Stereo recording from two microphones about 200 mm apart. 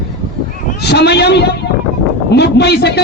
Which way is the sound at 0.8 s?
55° left (ahead or behind).